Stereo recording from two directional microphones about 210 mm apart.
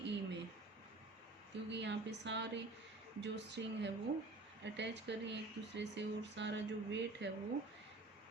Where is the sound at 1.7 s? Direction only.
55° right (ahead or behind).